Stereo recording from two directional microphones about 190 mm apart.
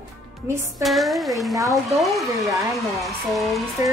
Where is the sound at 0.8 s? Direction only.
Centre (ahead or behind).